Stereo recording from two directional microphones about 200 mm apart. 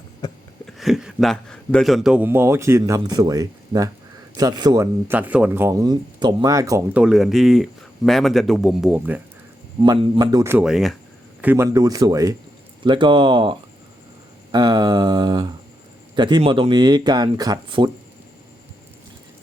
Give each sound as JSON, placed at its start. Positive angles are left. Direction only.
{"t": 0.6, "sound": "a man's voice", "side_deg": 0}
{"t": 9.8, "sound": "speech", "side_deg": -20}